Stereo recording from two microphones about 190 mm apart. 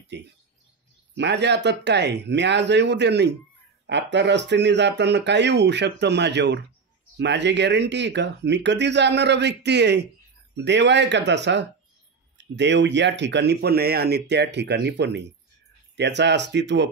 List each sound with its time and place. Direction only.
0.1 s speech: 65° right (ahead or behind)